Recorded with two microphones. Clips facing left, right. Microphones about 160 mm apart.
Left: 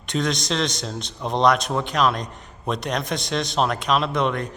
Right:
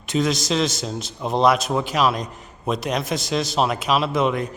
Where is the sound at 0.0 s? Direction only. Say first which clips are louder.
Right 3 dB; 5° right (ahead or behind).